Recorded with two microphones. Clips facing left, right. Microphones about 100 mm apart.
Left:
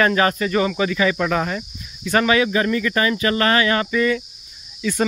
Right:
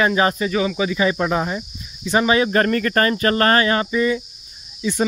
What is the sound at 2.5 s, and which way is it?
Speech, 55° right (ahead or behind).